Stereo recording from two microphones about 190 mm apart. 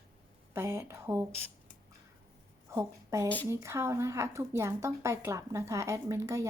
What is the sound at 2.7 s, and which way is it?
A woman's voice, 15° right (ahead or behind).